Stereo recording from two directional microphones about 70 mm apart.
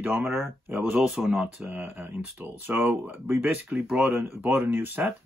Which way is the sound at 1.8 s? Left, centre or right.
Right.